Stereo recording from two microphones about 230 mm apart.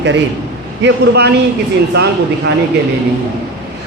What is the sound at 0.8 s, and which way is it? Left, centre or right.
Speech, right.